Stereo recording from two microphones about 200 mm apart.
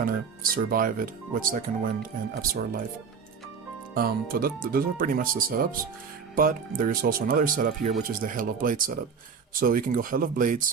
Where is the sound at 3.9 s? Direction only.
45° right (ahead or behind).